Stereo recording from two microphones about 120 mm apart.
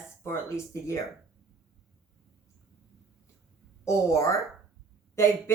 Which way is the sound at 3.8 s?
25° left (ahead or behind).